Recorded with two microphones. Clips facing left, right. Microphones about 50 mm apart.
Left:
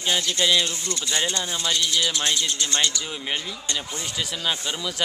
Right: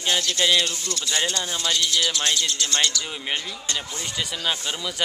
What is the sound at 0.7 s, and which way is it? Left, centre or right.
Speech, left.